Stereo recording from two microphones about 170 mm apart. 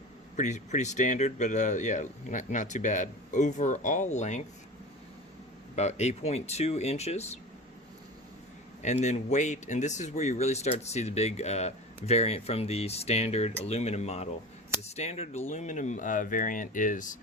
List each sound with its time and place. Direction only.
0.3 s speech: 45° left (ahead or behind)
5.7 s speech: 40° left (ahead or behind)
8.8 s speech: 40° left (ahead or behind)